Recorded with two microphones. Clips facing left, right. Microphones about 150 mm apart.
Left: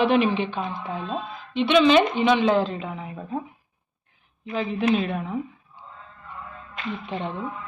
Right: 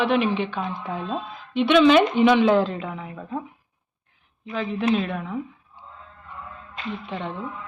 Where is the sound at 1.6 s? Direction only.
20° left (ahead or behind).